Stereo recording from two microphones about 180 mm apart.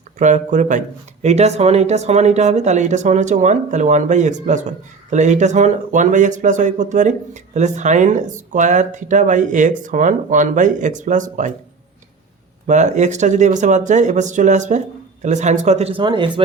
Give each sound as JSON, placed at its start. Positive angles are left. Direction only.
{"t": 0.2, "sound": "speech", "side_deg": -40}
{"t": 12.6, "sound": "speech", "side_deg": -40}